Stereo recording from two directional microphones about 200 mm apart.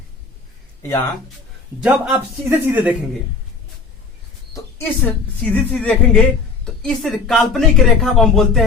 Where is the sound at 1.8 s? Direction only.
10° right (ahead or behind).